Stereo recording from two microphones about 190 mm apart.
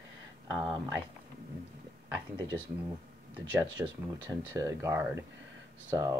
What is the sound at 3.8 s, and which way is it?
Speech, 10° right (ahead or behind).